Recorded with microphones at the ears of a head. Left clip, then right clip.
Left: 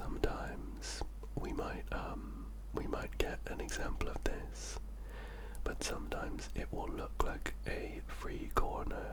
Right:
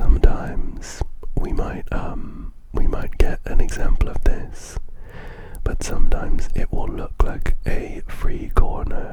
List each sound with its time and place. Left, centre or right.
0.0 s whispering: right